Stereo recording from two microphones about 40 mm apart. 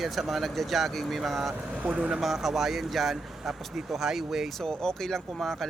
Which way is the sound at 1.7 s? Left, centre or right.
Right.